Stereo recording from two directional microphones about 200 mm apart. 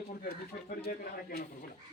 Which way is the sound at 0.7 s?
50° left (ahead or behind).